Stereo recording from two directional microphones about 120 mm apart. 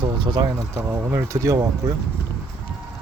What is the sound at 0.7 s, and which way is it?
Speech, 25° right (ahead or behind).